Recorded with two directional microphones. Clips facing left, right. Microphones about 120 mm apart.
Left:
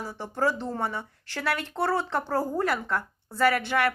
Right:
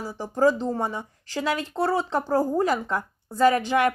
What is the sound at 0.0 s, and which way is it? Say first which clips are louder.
Speech: right 6 dB; 10° right (ahead or behind).